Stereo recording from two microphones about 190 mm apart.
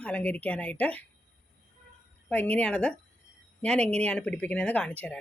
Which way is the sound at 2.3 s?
10° left (ahead or behind).